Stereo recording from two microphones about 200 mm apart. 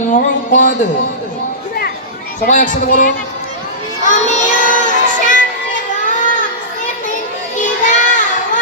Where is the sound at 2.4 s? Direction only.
40° left (ahead or behind).